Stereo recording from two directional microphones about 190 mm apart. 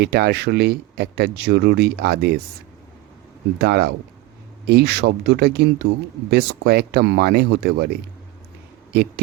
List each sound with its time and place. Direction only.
0.0 s speech: 60° right (ahead or behind)
3.6 s speech: 60° right (ahead or behind)
8.9 s speech: 55° right (ahead or behind)